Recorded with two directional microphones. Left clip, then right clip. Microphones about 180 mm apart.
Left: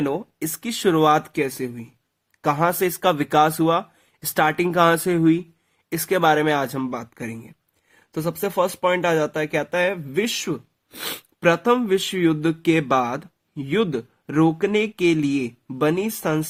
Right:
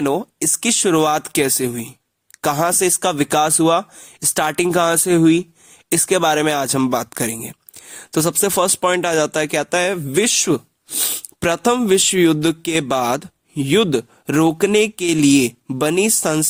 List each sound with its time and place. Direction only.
0.0 s speech: 45° right (ahead or behind)